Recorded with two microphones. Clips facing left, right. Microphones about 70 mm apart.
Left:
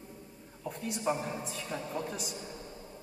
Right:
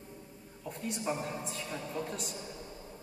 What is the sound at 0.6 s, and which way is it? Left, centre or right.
A woman's voice, centre.